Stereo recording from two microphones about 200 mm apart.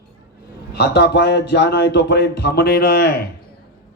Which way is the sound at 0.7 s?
55° left (ahead or behind).